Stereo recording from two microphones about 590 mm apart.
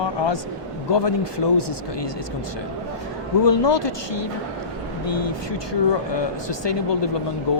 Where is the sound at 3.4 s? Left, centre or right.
Left.